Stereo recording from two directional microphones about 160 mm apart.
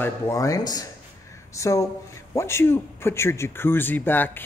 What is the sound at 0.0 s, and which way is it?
Speech, 20° left (ahead or behind).